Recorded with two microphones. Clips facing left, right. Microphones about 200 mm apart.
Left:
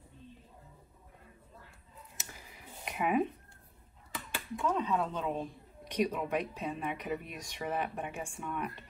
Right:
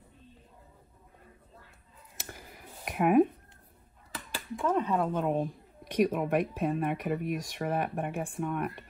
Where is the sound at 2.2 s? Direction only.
55° right (ahead or behind).